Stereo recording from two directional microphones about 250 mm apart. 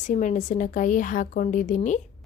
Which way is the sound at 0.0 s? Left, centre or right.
Left.